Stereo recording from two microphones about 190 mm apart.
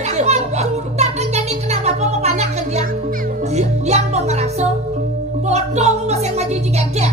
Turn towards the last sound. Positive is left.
turn(degrees=-35)  # may be behind; listen again after turning